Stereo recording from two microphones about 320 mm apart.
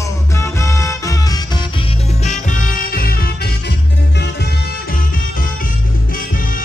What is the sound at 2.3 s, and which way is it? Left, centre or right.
Music, left.